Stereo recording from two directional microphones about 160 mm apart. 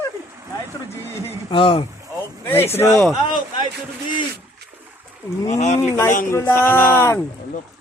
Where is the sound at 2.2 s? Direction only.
15° left (ahead or behind).